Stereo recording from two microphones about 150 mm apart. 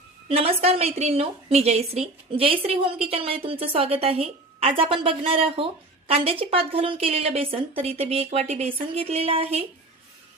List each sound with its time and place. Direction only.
0.3 s a woman's voice: 40° right (ahead or behind)